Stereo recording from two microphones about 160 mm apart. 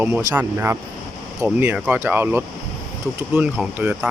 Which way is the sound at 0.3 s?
15° right (ahead or behind).